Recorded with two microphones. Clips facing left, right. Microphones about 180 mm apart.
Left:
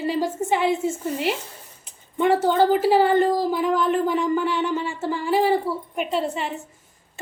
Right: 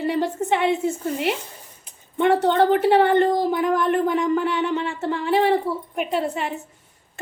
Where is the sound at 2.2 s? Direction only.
5° left (ahead or behind).